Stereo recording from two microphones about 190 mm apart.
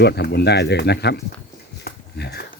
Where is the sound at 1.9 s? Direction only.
60° left (ahead or behind).